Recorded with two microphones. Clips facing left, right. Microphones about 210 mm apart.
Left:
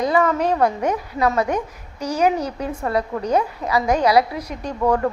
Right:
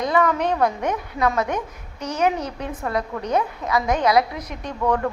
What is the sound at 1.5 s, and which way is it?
Speech, 35° left (ahead or behind).